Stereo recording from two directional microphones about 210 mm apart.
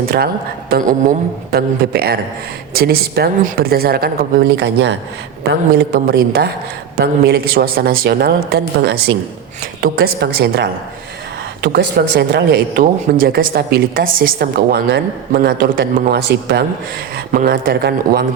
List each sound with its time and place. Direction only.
0.7 s speech: 40° right (ahead or behind)